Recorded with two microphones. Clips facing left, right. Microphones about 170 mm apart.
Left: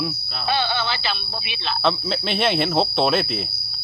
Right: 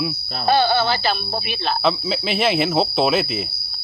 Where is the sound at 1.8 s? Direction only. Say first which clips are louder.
Left 1 dB; 5° right (ahead or behind).